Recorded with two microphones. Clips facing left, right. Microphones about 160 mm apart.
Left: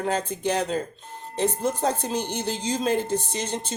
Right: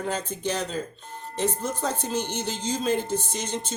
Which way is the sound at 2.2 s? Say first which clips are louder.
Left 2 dB; 10° left (ahead or behind).